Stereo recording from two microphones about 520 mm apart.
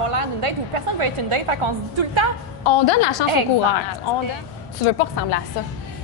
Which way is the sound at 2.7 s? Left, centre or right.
Left.